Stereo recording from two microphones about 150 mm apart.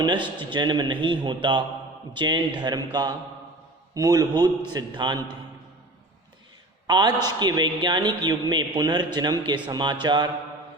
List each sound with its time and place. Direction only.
0.0 s a man's voice: 30° right (ahead or behind)
6.8 s a man's voice: 30° right (ahead or behind)